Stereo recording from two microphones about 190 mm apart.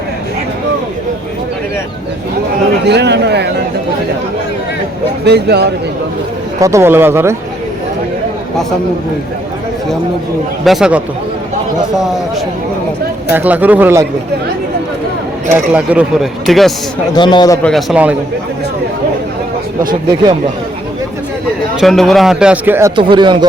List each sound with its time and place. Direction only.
2.8 s a sound: 65° right (ahead or behind)
5.2 s speech: 60° right (ahead or behind)
6.6 s speech: 15° right (ahead or behind)
10.6 s speech: centre (ahead or behind)
13.3 s speech: 10° right (ahead or behind)
15.5 s speech: 5° right (ahead or behind)
17.2 s a man's voice: 25° left (ahead or behind)
17.6 s speech: centre (ahead or behind)
21.8 s speech: centre (ahead or behind)
23.0 s speech: 25° right (ahead or behind)